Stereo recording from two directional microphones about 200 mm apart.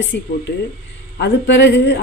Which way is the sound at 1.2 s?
60° left (ahead or behind).